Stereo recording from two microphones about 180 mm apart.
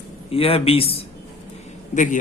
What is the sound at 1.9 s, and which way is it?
Speech, 45° left (ahead or behind).